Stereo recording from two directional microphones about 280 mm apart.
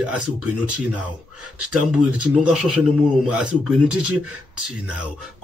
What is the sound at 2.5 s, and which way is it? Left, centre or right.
Speech, centre.